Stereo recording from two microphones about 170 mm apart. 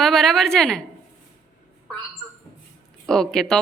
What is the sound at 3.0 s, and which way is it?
Speech, 5° left (ahead or behind).